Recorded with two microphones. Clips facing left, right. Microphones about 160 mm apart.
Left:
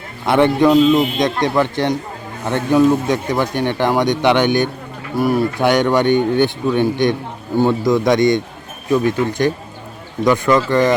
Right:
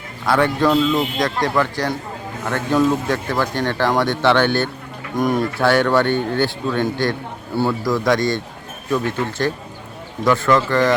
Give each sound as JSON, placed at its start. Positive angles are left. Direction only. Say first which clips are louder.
{"t": 0.3, "sound": "speech", "louder": "left 4 dB", "side_deg": 20}
{"t": 5.5, "sound": "speech", "louder": "right 1 dB", "side_deg": 15}